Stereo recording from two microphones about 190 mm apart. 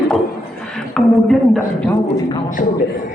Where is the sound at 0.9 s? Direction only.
Centre (ahead or behind).